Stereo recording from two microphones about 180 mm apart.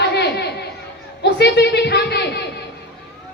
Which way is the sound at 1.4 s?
65° left (ahead or behind).